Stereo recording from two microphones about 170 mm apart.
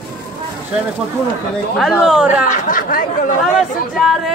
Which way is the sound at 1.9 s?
5° right (ahead or behind).